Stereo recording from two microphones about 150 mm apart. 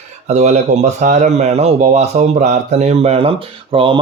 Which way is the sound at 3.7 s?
35° right (ahead or behind).